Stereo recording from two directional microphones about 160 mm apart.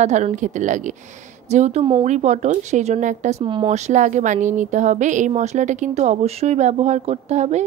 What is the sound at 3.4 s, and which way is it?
Speech, 30° right (ahead or behind).